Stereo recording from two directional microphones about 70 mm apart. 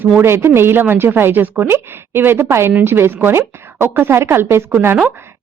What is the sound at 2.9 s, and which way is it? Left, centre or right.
A woman's voice, right.